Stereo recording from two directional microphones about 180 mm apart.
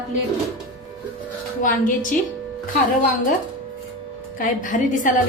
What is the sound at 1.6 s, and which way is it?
Speech, 50° left (ahead or behind).